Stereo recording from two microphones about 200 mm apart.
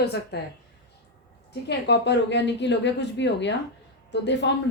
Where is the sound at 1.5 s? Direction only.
60° left (ahead or behind).